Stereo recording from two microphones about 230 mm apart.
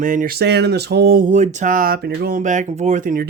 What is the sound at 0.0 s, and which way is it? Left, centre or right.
Speech, right.